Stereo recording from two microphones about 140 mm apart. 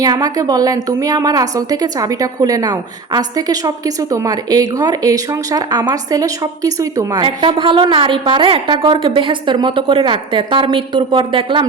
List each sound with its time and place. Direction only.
0.0 s a woman's voice: 25° right (ahead or behind)
7.2 s a woman's voice: 35° right (ahead or behind)